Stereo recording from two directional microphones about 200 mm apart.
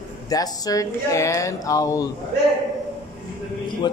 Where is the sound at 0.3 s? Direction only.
20° left (ahead or behind).